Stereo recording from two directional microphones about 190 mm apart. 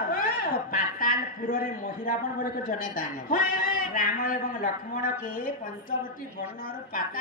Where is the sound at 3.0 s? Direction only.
45° left (ahead or behind).